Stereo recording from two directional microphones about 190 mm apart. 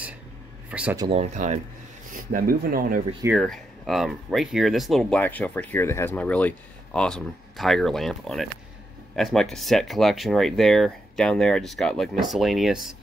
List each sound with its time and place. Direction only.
0.7 s speech: 5° right (ahead or behind)
1.1 s speech: 40° right (ahead or behind)
2.1 s speech: 50° right (ahead or behind)
3.3 s speech: centre (ahead or behind)